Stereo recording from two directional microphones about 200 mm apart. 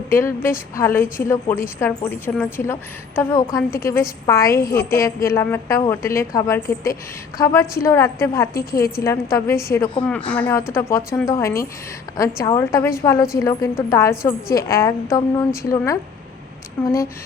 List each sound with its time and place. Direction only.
0.1 s a woman's voice: 10° left (ahead or behind)